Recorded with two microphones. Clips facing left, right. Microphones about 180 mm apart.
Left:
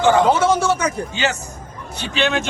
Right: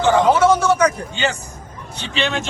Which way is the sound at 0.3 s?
25° left (ahead or behind).